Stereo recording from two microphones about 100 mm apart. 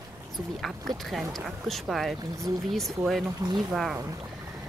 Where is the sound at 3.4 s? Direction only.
40° right (ahead or behind).